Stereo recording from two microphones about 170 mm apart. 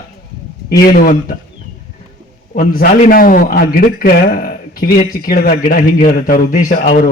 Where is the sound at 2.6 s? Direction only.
60° left (ahead or behind).